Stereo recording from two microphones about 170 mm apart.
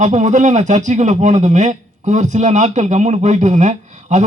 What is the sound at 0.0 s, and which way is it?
A man's voice, 45° right (ahead or behind).